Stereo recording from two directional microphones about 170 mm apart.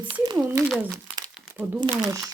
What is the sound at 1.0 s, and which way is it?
Crumpling, 25° right (ahead or behind).